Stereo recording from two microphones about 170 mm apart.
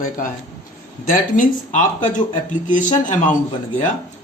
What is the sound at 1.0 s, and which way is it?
Speech, 50° left (ahead or behind).